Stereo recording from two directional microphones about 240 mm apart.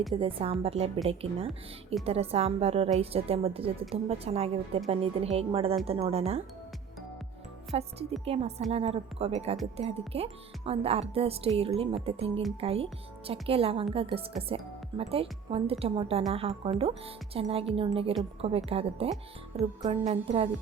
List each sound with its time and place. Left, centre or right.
0.1 s a woman's voice: right
7.7 s a woman's voice: right